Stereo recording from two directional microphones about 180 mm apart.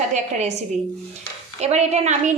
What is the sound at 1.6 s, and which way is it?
Speech, 35° right (ahead or behind).